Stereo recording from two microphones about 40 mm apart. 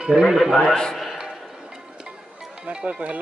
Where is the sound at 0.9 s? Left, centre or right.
Centre.